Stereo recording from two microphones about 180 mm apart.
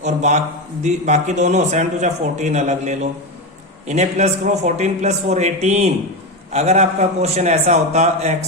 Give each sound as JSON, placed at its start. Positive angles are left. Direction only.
{"t": 0.0, "sound": "a man's voice", "side_deg": -40}